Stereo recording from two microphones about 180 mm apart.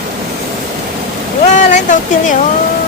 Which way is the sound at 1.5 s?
45° left (ahead or behind).